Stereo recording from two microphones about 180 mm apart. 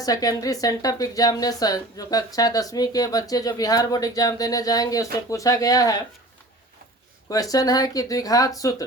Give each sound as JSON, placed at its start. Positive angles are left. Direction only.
{"t": 0.0, "sound": "speech", "side_deg": 20}
{"t": 7.3, "sound": "speech", "side_deg": 20}